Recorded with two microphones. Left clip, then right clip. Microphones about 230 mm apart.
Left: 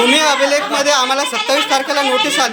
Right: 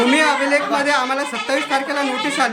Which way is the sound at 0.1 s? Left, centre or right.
Centre.